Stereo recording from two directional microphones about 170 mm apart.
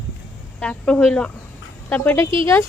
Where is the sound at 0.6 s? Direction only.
5° left (ahead or behind).